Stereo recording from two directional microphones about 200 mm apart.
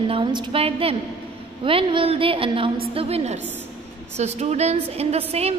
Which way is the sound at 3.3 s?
10° right (ahead or behind).